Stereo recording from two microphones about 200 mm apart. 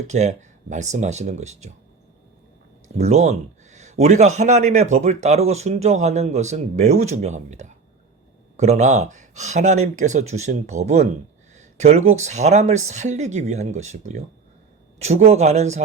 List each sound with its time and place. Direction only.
0.1 s a man's voice: 35° right (ahead or behind)
3.0 s a man's voice: 35° right (ahead or behind)